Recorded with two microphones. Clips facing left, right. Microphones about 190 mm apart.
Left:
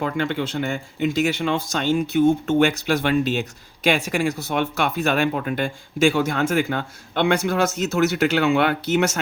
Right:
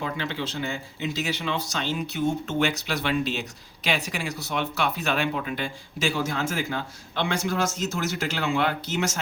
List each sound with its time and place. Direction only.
0.0 s speech: 55° left (ahead or behind)